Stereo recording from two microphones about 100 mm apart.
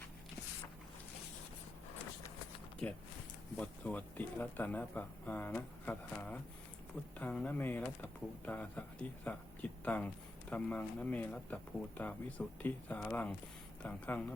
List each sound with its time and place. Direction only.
2.8 s speech: 15° left (ahead or behind)